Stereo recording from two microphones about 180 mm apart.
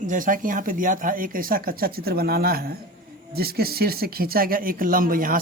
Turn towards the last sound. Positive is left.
turn(degrees=-50)  # may be behind; listen again after turning